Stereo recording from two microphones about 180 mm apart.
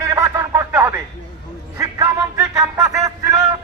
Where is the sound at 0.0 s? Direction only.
15° right (ahead or behind).